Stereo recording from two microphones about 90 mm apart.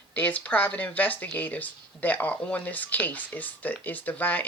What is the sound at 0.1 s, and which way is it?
Speech, 15° left (ahead or behind).